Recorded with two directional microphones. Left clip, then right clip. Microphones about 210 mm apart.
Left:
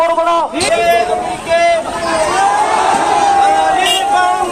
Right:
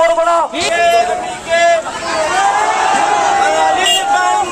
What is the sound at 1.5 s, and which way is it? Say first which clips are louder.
Speech: even; 5° right (ahead or behind).